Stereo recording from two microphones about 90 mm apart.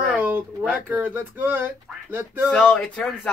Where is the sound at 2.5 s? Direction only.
10° left (ahead or behind).